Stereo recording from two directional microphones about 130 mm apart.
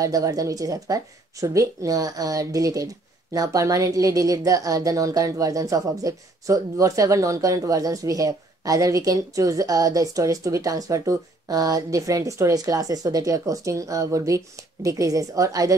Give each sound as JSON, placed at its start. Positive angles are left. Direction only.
{"t": 0.0, "sound": "speech", "side_deg": -25}